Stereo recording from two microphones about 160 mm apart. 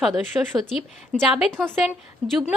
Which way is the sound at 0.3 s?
Centre (ahead or behind).